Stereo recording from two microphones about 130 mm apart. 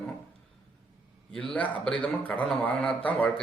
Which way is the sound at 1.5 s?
10° left (ahead or behind).